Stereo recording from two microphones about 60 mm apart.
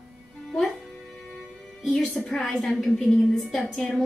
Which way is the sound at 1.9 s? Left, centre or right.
Centre.